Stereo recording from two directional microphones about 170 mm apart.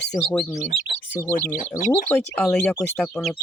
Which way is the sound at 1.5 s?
50° left (ahead or behind).